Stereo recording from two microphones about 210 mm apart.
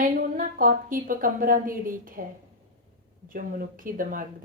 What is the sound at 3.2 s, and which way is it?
Speech, 40° right (ahead or behind).